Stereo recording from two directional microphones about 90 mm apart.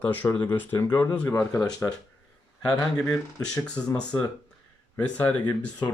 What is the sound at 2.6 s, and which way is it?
Speech, 40° left (ahead or behind).